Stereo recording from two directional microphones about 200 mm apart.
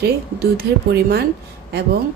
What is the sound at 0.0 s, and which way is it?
Speech, 50° right (ahead or behind).